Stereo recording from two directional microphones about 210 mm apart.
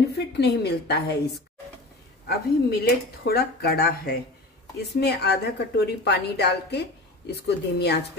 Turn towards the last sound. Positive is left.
turn(degrees=50)  # may be behind; listen again after turning